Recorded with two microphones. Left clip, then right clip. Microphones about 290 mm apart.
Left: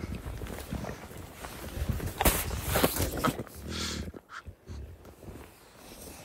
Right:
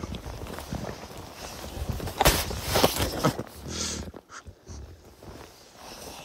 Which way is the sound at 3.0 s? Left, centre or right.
Centre.